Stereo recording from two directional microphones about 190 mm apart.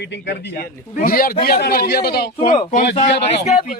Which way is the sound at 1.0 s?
50° left (ahead or behind).